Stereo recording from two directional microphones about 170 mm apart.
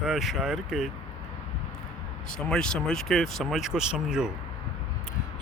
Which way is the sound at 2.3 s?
5° left (ahead or behind).